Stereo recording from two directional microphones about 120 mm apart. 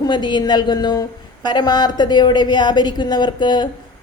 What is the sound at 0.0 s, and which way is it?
A woman's voice, 40° left (ahead or behind).